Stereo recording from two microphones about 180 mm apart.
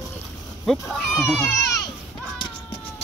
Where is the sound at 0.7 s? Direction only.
Centre (ahead or behind).